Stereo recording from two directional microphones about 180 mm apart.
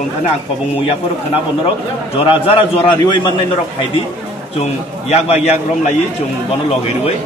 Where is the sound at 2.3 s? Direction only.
30° left (ahead or behind).